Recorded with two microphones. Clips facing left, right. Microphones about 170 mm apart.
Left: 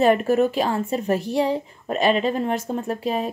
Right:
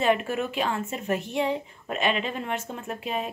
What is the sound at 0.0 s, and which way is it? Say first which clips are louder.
A woman's voice: left 7 dB; 40° left (ahead or behind).